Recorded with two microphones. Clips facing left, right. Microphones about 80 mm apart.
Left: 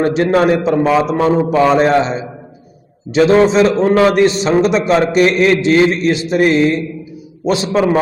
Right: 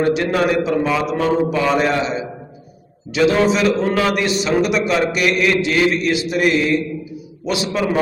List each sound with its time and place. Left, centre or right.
0.0 s a man's voice: left